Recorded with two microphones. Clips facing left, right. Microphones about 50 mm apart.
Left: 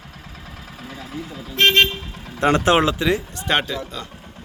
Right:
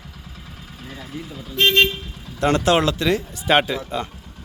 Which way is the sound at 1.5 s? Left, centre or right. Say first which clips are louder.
Left 1 dB; left.